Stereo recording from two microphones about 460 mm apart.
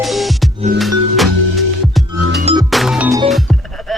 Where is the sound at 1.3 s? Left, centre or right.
Right.